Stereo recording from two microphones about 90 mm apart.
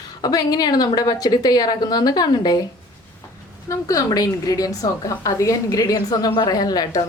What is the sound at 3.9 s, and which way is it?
A woman's voice, 40° left (ahead or behind).